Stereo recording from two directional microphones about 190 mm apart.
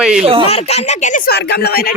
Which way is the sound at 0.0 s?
5° right (ahead or behind).